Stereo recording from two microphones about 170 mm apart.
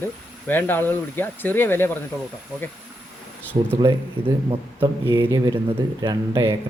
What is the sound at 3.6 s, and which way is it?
Speech, 35° right (ahead or behind).